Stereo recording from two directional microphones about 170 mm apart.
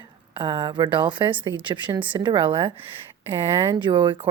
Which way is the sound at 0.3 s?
25° right (ahead or behind).